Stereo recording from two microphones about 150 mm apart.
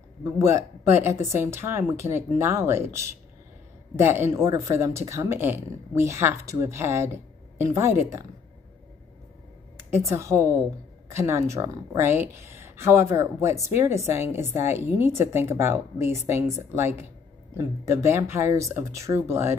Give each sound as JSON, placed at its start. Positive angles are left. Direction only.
{"t": 0.2, "sound": "speech", "side_deg": -20}
{"t": 9.8, "sound": "a sound", "side_deg": -15}
{"t": 10.1, "sound": "speech", "side_deg": -15}